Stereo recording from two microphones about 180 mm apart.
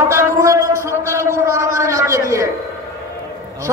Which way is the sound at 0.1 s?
15° right (ahead or behind).